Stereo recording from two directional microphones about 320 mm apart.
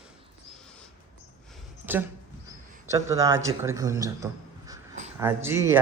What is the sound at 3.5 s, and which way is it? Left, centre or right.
A man's voice, centre.